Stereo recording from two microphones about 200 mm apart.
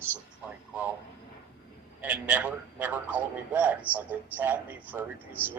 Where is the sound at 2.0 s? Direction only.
5° right (ahead or behind).